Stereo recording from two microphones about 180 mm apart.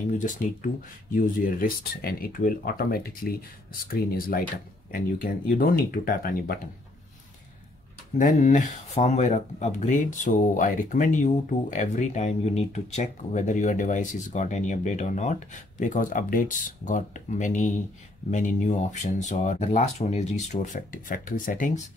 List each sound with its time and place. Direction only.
0.2 s speech: 45° left (ahead or behind)
8.2 s speech: 45° left (ahead or behind)